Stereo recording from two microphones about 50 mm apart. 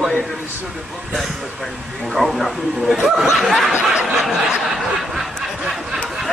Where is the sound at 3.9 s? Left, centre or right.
Centre.